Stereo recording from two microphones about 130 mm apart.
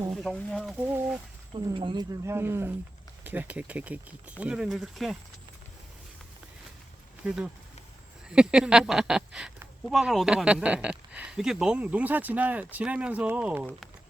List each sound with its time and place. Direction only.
0.1 s speech: centre (ahead or behind)
1.5 s speech: 40° right (ahead or behind)
2.2 s speech: 20° right (ahead or behind); by 5.1 s centre (ahead or behind)
7.3 s speech: 5° right (ahead or behind)